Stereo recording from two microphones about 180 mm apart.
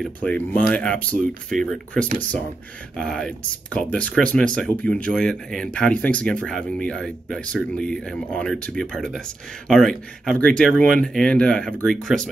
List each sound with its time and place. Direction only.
0.0 s speech: 5° left (ahead or behind)